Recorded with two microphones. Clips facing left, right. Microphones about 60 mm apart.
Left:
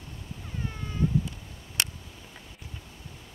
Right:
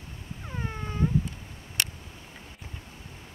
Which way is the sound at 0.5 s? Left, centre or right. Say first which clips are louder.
Right 2 dB; right.